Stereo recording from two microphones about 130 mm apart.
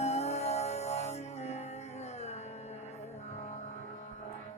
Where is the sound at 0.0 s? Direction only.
55° left (ahead or behind).